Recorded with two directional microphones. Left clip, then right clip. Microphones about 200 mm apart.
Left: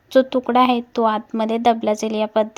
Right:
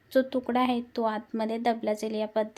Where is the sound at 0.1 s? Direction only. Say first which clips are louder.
Left 10 dB; 20° left (ahead or behind).